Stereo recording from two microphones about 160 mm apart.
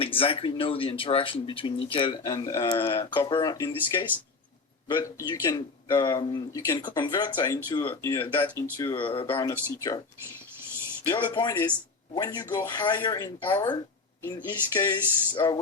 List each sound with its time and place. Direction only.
0.0 s speech: 35° left (ahead or behind); by 8.6 s 15° left (ahead or behind)
8.8 s speech: 30° left (ahead or behind)
11.1 s speech: 30° left (ahead or behind)